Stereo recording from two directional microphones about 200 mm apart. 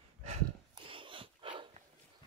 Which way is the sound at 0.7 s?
25° right (ahead or behind).